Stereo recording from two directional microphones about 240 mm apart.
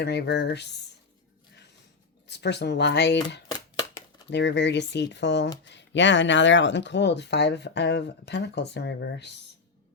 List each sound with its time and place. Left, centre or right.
0.0 s speech: left
2.2 s speech: left
3.5 s a sound: centre
4.3 s speech: left